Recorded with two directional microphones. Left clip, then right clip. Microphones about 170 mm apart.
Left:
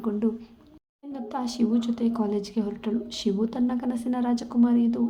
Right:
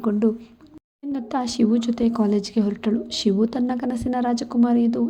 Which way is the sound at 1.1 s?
30° right (ahead or behind).